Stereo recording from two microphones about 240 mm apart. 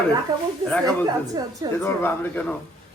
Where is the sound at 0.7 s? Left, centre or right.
Centre.